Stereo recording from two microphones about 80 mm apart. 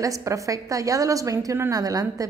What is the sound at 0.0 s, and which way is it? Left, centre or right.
A woman's voice, right.